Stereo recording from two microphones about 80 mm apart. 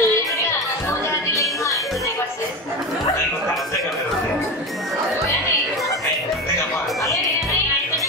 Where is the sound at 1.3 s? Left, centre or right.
Left.